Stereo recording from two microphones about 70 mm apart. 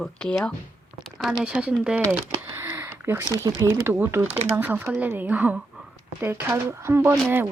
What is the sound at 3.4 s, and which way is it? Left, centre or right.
Speech, right.